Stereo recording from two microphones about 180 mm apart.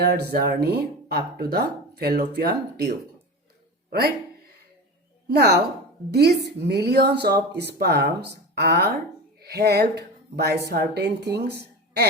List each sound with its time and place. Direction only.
0.0 s speech: 65° right (ahead or behind)
5.3 s speech: 60° right (ahead or behind)